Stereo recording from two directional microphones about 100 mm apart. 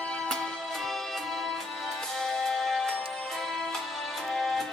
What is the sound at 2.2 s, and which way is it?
Music, 5° left (ahead or behind).